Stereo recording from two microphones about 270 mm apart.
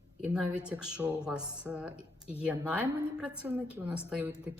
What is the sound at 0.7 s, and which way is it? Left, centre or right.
Speech, centre.